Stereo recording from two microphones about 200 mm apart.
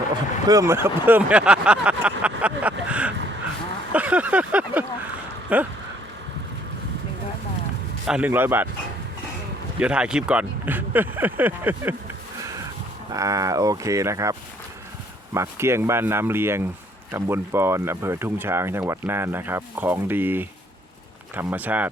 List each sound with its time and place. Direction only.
0.4 s speech: 15° right (ahead or behind)
3.9 s a sound: 5° right (ahead or behind)
5.5 s speech: 5° right (ahead or behind)
8.0 s speech: 5° right (ahead or behind)
9.8 s speech: 5° right (ahead or behind)
13.1 s speech: 15° right (ahead or behind)